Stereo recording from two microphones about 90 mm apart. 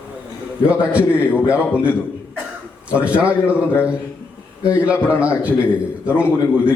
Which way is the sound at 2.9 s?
15° right (ahead or behind).